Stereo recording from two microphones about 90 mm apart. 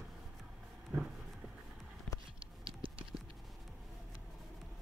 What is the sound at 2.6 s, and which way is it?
Clip-clop, 80° right.